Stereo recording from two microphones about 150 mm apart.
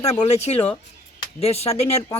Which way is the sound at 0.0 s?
45° left (ahead or behind).